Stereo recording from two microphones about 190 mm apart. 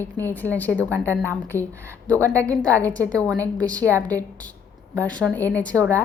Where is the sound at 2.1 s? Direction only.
15° right (ahead or behind).